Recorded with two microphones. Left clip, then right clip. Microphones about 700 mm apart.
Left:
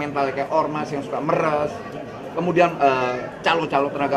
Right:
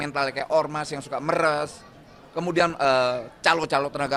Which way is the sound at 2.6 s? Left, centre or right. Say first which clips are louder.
Left 2 dB; right.